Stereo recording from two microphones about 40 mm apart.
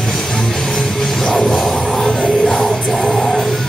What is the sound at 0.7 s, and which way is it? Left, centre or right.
Music, centre.